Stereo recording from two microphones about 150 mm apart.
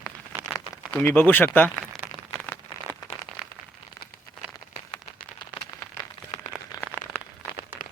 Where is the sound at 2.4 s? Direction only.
15° left (ahead or behind).